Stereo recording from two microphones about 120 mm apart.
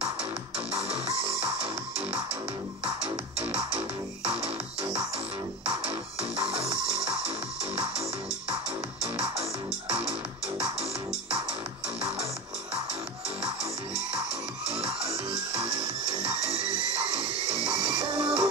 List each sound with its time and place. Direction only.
0.0 s music: 55° right (ahead or behind)
3.3 s music: 55° right (ahead or behind)
6.4 s music: 55° right (ahead or behind)
9.0 s music: 55° right (ahead or behind)
16.2 s music: 55° right (ahead or behind)